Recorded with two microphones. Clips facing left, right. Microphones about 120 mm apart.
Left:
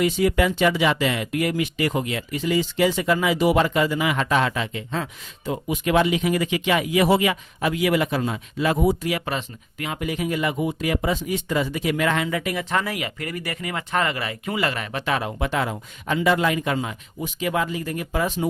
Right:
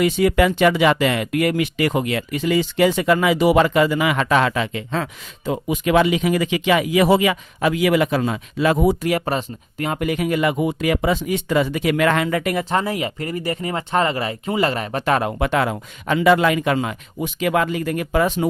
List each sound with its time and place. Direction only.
0.0 s speech: 75° right (ahead or behind)
9.0 s speech: 40° right (ahead or behind)
10.0 s speech: 65° right (ahead or behind)
12.7 s speech: 30° right (ahead or behind)
15.0 s speech: 50° right (ahead or behind); by 18.4 s 75° right (ahead or behind)